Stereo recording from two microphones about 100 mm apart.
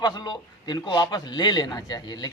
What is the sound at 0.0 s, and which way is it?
A man's voice, 45° left (ahead or behind).